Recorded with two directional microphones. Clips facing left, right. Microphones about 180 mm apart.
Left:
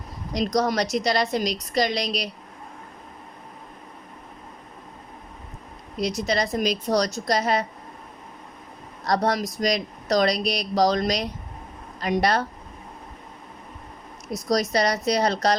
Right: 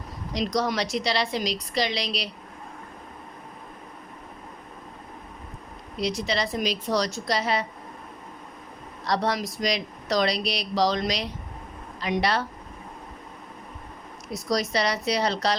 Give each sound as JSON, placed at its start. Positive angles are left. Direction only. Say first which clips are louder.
{"t": 0.3, "sound": "speech", "louder": "left 3 dB", "side_deg": 40}
{"t": 6.0, "sound": "speech", "louder": "left 2 dB", "side_deg": 45}
{"t": 9.0, "sound": "speech", "louder": "left 3 dB", "side_deg": 45}
{"t": 14.5, "sound": "speech", "louder": "left 3 dB", "side_deg": 45}